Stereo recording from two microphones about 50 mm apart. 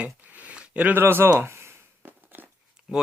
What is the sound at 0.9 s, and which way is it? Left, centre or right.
Speech, right.